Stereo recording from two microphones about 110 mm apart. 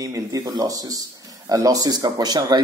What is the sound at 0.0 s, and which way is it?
Speech, 30° right (ahead or behind).